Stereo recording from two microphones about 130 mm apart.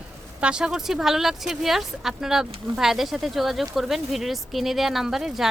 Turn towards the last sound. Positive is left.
turn(degrees=-5)  # may be behind; listen again after turning